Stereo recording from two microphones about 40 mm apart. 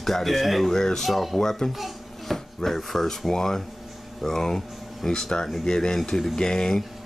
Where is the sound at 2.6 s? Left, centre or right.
Centre.